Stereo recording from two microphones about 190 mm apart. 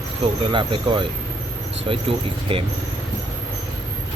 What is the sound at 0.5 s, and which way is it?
Speech, 25° right (ahead or behind).